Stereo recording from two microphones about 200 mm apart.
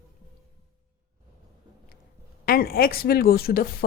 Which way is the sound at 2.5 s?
50° left (ahead or behind).